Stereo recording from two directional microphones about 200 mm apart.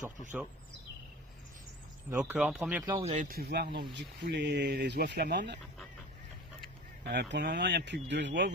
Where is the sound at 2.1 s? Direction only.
5° right (ahead or behind).